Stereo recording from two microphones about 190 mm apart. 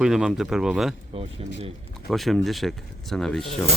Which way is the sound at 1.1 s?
30° right (ahead or behind).